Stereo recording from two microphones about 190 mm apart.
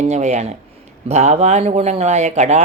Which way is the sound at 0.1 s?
40° right (ahead or behind).